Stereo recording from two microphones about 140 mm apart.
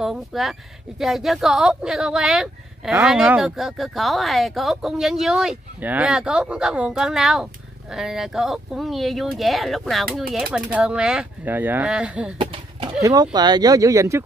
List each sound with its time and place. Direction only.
0.0 s a woman's voice: centre (ahead or behind)
13.0 s speech: 30° right (ahead or behind)